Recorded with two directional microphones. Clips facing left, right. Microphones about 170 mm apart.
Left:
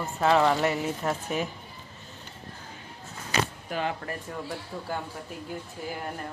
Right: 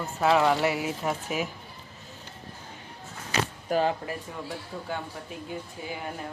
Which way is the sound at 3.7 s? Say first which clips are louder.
Right 6 dB; 35° right (ahead or behind).